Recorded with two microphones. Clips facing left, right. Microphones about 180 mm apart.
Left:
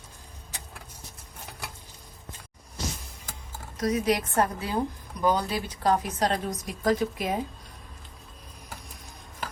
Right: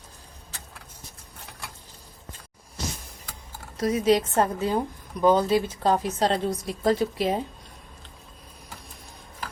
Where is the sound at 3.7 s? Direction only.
30° right (ahead or behind).